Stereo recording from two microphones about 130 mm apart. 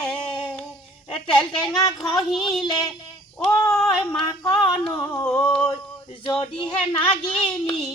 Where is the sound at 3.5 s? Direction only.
25° left (ahead or behind).